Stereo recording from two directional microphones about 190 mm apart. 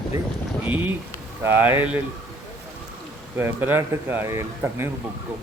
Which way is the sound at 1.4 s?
10° right (ahead or behind).